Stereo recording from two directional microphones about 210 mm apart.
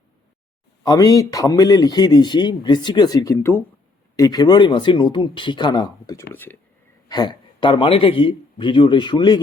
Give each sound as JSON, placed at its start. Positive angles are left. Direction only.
{"t": 0.9, "sound": "a man's voice", "side_deg": 15}
{"t": 7.1, "sound": "a man's voice", "side_deg": 20}